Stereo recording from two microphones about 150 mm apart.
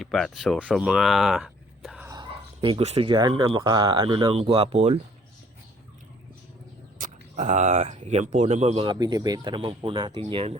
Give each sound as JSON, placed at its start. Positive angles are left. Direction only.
{"t": 0.0, "sound": "speech", "side_deg": 5}
{"t": 0.8, "sound": "a sound", "side_deg": -5}
{"t": 2.0, "sound": "whispering", "side_deg": -25}
{"t": 2.3, "sound": "speech", "side_deg": -35}
{"t": 7.0, "sound": "speech", "side_deg": -50}
{"t": 8.8, "sound": "speech", "side_deg": -30}